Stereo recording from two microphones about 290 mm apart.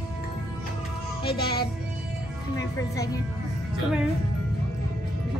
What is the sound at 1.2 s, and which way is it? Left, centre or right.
Speech, centre.